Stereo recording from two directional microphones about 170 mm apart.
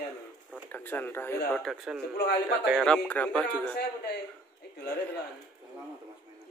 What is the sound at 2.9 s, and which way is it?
Speech, 5° left (ahead or behind).